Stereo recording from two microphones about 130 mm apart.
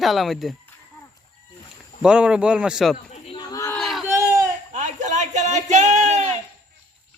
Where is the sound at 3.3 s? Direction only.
30° left (ahead or behind).